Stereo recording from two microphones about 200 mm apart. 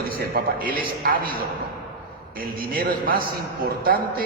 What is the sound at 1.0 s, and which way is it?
A man's voice, 45° right (ahead or behind).